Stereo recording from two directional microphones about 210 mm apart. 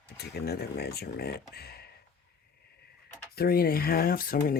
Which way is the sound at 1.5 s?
50° left (ahead or behind).